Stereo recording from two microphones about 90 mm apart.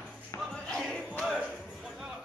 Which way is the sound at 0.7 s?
10° left (ahead or behind).